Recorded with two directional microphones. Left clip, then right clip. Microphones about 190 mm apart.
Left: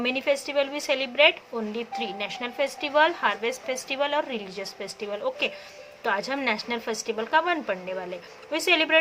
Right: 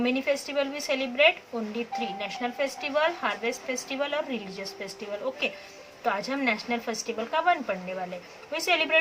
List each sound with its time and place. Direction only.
0.0 s speech: 55° left (ahead or behind)